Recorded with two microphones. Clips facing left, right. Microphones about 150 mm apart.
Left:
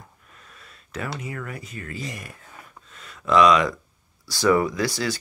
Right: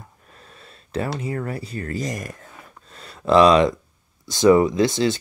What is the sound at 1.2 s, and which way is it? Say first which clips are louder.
Speech: right 7 dB; 35° right (ahead or behind).